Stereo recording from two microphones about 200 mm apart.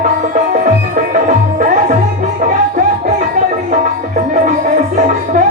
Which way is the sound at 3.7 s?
35° right (ahead or behind).